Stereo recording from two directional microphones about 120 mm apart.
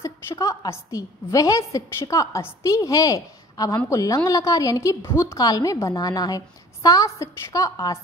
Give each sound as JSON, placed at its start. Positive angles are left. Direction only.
{"t": 0.0, "sound": "a woman's voice", "side_deg": 25}